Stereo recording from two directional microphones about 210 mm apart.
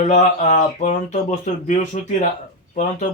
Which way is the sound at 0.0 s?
35° left (ahead or behind).